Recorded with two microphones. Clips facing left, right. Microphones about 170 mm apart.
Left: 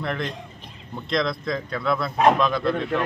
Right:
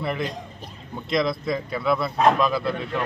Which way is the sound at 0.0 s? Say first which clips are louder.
Right 1 dB; 5° right (ahead or behind).